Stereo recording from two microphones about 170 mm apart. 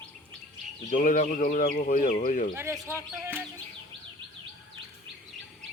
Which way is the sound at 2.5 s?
15° right (ahead or behind).